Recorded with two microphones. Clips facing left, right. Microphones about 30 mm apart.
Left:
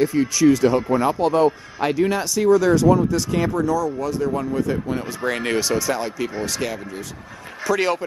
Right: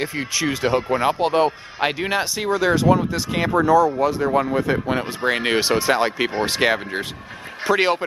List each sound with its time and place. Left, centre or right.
0.0 s speech: right
4.3 s speech: right
4.6 s speech: right